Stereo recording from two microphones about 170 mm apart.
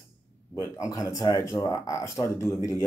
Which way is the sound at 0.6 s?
20° left (ahead or behind).